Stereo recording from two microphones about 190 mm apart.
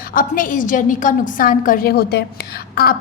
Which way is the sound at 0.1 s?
45° left (ahead or behind).